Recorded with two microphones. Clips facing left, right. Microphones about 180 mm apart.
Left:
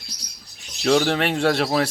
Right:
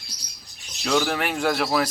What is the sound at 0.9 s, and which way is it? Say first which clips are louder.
Speech: left 4 dB; 35° left (ahead or behind).